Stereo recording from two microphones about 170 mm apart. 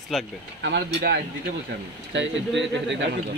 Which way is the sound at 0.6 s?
85° right.